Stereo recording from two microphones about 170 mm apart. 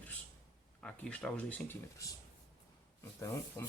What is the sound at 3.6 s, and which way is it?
Speech, 15° left (ahead or behind).